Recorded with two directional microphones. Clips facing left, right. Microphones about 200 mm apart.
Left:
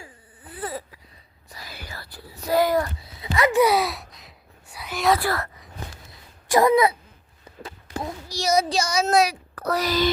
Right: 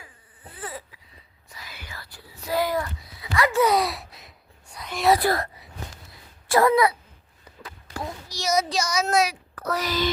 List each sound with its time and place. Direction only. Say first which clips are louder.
0.6 s wheeze: left 5 dB; 40° left (ahead or behind)
1.5 s whispering: left 3 dB; 35° left (ahead or behind)
3.2 s a sound: left 3 dB; 25° left (ahead or behind); by 5.1 s 5° left (ahead or behind)
5.1 s speech: right 2 dB; 15° right (ahead or behind)
6.5 s speech: left 1 dB; 20° left (ahead or behind)
7.6 s a sound: left 2 dB; 30° left (ahead or behind)